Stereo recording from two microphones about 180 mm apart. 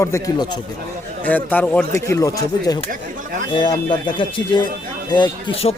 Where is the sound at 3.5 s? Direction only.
25° left (ahead or behind).